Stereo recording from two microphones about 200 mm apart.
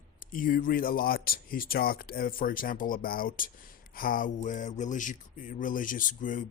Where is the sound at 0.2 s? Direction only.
40° left (ahead or behind).